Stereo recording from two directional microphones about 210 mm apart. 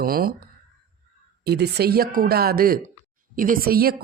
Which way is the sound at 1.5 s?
50° right (ahead or behind).